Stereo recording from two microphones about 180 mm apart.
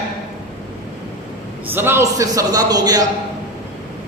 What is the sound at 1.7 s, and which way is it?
A man's voice, 15° right (ahead or behind).